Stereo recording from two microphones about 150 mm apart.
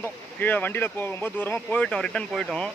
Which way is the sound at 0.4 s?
10° left (ahead or behind).